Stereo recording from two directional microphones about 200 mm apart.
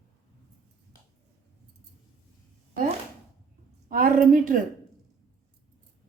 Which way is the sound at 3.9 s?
45° right (ahead or behind).